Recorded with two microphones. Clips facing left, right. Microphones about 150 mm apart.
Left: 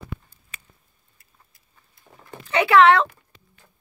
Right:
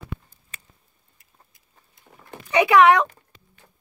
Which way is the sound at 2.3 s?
15° right (ahead or behind).